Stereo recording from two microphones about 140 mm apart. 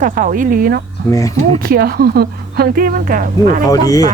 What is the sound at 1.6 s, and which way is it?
Speech, 90° right.